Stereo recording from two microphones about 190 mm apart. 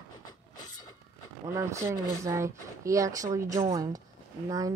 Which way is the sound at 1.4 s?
15° right (ahead or behind).